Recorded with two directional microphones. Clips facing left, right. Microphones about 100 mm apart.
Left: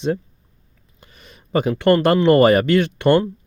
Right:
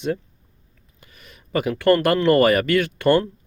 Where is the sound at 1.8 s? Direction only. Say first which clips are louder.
Left 2 dB; 25° left (ahead or behind).